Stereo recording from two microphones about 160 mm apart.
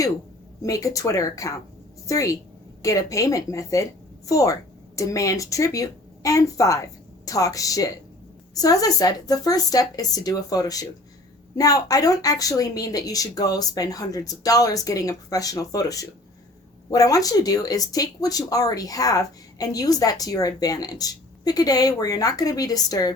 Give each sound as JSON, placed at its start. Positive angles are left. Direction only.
{"t": 0.6, "sound": "speech", "side_deg": 20}